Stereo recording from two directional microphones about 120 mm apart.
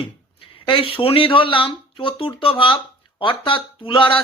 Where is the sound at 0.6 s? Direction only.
45° left (ahead or behind).